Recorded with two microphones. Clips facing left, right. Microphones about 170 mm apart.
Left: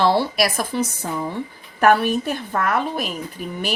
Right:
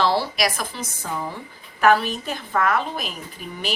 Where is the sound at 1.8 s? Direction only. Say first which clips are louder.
Left 2 dB; 55° left (ahead or behind).